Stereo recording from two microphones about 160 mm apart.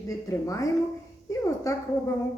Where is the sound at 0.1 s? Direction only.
20° left (ahead or behind).